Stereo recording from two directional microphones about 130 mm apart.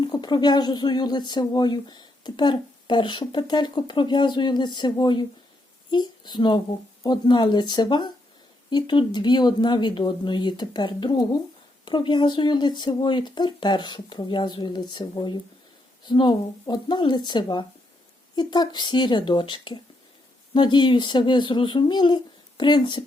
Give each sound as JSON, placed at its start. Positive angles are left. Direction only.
{"t": 0.0, "sound": "speech", "side_deg": 35}